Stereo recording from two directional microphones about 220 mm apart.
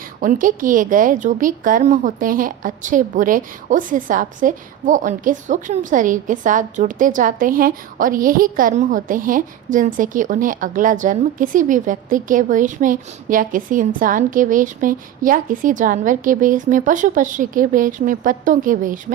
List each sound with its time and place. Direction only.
0.2 s a woman's voice: 40° right (ahead or behind)